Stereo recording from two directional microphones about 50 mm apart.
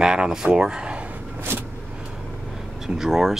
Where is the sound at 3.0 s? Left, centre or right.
Centre.